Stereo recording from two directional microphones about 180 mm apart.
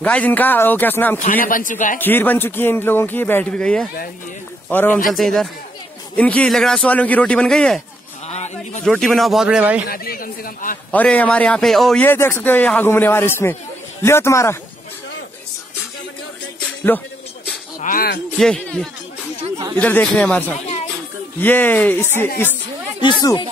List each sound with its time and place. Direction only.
0.0 s a man's voice: 10° left (ahead or behind)
1.2 s a man's voice: 50° left (ahead or behind)
2.0 s a man's voice: 10° left (ahead or behind)
8.3 s a sound: 35° left (ahead or behind)
8.8 s a man's voice: centre (ahead or behind)
9.8 s a man's voice: 55° left (ahead or behind)
10.9 s a man's voice: 10° left (ahead or behind)
17.7 s speech: 50° left (ahead or behind)
18.4 s a man's voice: 5° left (ahead or behind)
22.9 s speech: 25° left (ahead or behind)